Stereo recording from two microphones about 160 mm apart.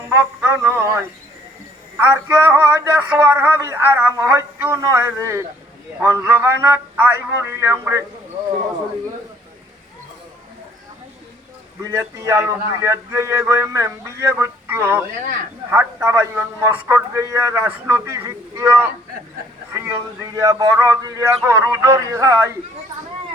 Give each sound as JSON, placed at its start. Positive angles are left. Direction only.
{"t": 0.1, "sound": "a man's voice", "side_deg": -15}
{"t": 11.8, "sound": "a man's voice", "side_deg": -20}